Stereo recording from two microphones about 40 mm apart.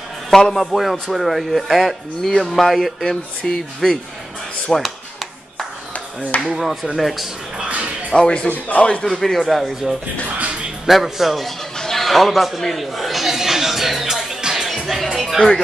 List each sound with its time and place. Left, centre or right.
0.3 s speech: centre
0.7 s speech: centre
6.5 s speech: centre
7.6 s a sound: right
8.1 s speech: left
8.5 s a man's voice: left
9.0 s speech: centre
11.7 s a sound: centre